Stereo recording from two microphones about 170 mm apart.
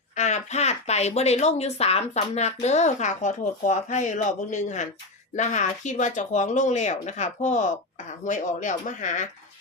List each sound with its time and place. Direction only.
0.2 s speech: 45° left (ahead or behind)